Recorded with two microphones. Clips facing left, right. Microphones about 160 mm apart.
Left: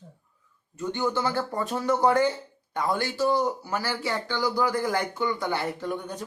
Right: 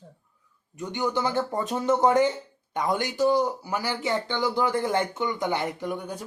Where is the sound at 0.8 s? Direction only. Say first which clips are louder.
Even; 15° right (ahead or behind).